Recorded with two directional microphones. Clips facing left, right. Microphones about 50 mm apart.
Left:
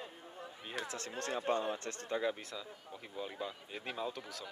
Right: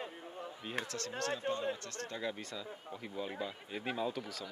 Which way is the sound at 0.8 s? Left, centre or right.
Left.